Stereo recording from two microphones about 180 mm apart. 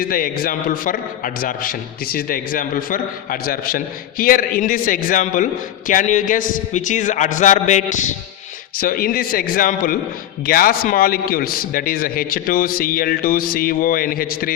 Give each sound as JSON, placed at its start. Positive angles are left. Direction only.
{"t": 0.1, "sound": "a man's voice", "side_deg": 55}